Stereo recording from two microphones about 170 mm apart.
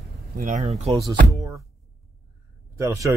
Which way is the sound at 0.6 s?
40° right (ahead or behind).